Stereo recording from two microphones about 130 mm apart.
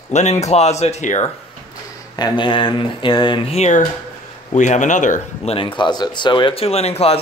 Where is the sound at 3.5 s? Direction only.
60° left (ahead or behind).